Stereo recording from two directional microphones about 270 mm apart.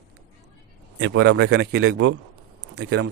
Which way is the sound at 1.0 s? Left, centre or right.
Right.